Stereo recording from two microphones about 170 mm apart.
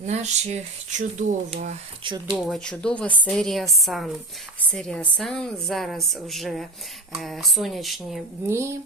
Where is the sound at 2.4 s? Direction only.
5° left (ahead or behind).